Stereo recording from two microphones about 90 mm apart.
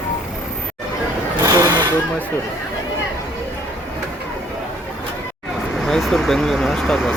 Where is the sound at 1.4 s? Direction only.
40° right (ahead or behind).